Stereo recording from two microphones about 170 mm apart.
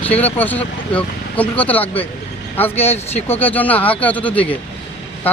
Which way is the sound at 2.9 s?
35° left (ahead or behind).